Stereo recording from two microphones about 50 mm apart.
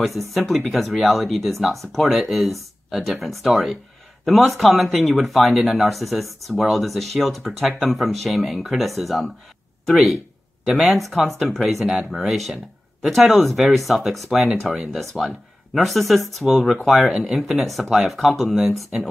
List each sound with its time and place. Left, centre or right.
0.3 s speech: centre
10.6 s speech: centre
10.9 s speech: centre
11.8 s speech: centre
12.1 s speech: centre